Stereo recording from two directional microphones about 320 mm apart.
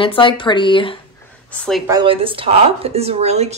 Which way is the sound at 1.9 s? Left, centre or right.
Centre.